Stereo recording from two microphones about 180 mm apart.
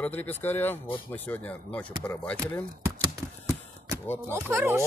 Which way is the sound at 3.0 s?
20° right (ahead or behind).